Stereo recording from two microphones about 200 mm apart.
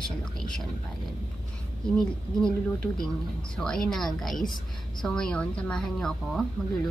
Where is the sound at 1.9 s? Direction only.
5° left (ahead or behind).